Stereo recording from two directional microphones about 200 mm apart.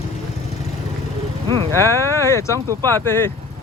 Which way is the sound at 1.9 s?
15° left (ahead or behind).